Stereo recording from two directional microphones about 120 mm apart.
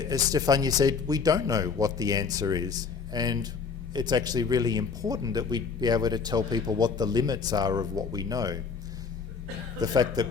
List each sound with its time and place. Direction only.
0.0 s speech: 30° right (ahead or behind)
9.8 s speech: 35° right (ahead or behind)